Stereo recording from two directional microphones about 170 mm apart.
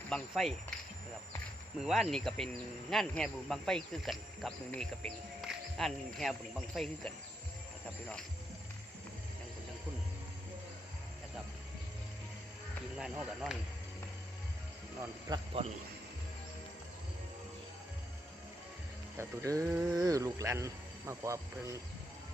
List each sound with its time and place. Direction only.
0.1 s speech: centre (ahead or behind)
1.8 s speech: centre (ahead or behind)
5.4 s music: centre (ahead or behind)
6.7 s speech: 5° left (ahead or behind)
13.0 s speech: 5° right (ahead or behind)
15.6 s a man's voice: 35° right (ahead or behind)
19.1 s speech: 15° right (ahead or behind)